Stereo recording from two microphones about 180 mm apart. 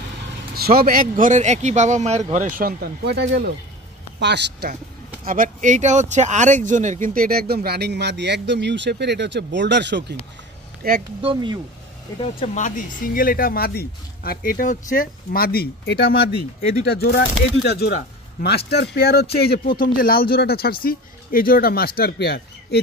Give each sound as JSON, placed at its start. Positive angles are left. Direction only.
{"t": 0.6, "sound": "speech", "side_deg": -55}
{"t": 5.2, "sound": "speech", "side_deg": -50}
{"t": 10.8, "sound": "speech", "side_deg": -60}
{"t": 11.1, "sound": "speech", "side_deg": -30}
{"t": 12.4, "sound": "speech", "side_deg": 45}
{"t": 17.6, "sound": "speech", "side_deg": 65}